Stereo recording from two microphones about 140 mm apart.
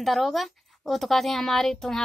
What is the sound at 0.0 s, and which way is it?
A woman's voice, centre (ahead or behind).